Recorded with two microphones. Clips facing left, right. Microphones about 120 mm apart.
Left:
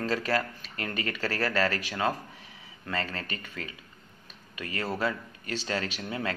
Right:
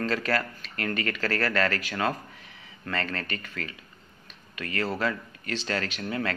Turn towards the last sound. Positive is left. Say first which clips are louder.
# right 2 dB
turn(degrees=20)  # may be behind; listen again after turning